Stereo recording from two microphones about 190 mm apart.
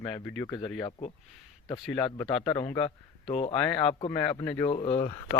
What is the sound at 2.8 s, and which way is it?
Speech, 30° left (ahead or behind).